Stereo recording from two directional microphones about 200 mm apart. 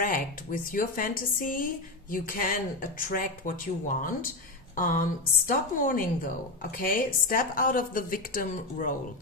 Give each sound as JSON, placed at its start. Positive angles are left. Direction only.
{"t": 0.0, "sound": "a woman's voice", "side_deg": 45}